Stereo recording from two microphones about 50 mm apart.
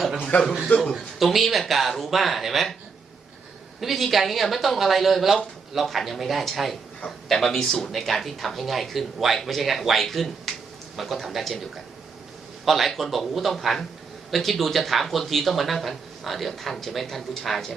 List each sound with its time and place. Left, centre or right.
0.2 s a sound: left
0.4 s speech: centre
0.9 s speech: centre
3.8 s speech: centre